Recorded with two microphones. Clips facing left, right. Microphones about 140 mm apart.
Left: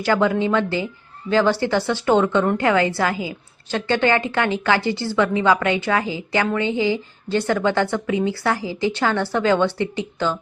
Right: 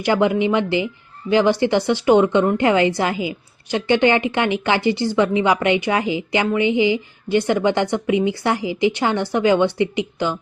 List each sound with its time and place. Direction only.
0.0 s a woman's voice: 15° right (ahead or behind)